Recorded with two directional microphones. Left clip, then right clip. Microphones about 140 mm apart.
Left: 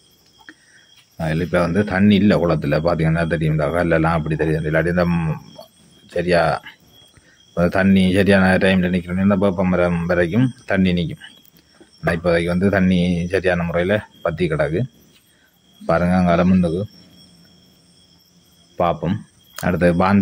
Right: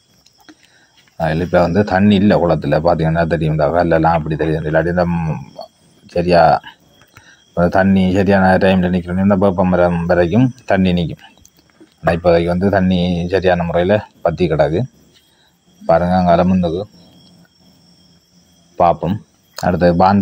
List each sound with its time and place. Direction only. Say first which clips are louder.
1.2 s speech: right 6 dB; 30° left (ahead or behind)
1.6 s speech: right 6 dB; 10° right (ahead or behind)
5.6 s cricket: right 8 dB; 5° right (ahead or behind)
7.5 s speech: right 4 dB; 5° left (ahead or behind)
8.5 s speech: right 4 dB; 5° right (ahead or behind)
12.5 s speech: right 3 dB; centre (ahead or behind)
13.2 s speech: right 6 dB; 45° left (ahead or behind)
13.5 s speech: right 5 dB; 5° right (ahead or behind)
16.2 s a man's voice: right 5 dB; 10° left (ahead or behind)
18.8 s speech: right 6 dB; 5° left (ahead or behind)